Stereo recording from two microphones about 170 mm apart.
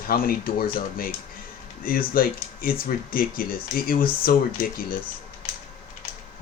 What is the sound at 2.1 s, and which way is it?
Speech, 60° left (ahead or behind).